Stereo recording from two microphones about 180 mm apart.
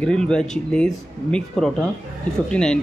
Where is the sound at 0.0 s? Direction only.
5° left (ahead or behind).